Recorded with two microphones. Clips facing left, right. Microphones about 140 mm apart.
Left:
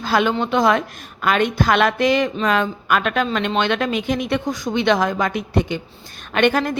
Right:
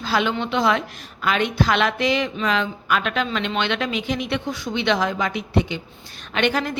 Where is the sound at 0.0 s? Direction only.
50° left (ahead or behind).